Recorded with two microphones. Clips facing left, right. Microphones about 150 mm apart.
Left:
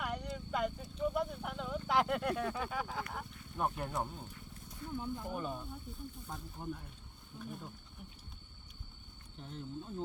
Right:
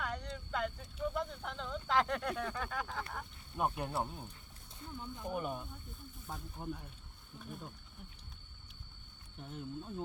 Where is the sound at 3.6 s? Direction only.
10° right (ahead or behind).